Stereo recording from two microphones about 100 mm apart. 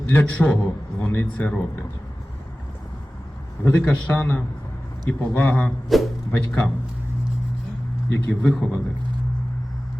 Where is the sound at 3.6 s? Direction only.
25° left (ahead or behind).